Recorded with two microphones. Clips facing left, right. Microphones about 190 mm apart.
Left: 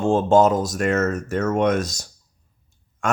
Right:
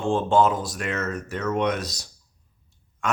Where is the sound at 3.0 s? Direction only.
45° left (ahead or behind).